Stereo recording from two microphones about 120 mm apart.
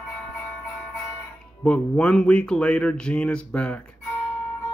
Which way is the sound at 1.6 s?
10° left (ahead or behind).